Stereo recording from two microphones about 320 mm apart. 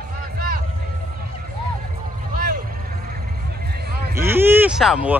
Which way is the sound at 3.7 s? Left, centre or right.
Right.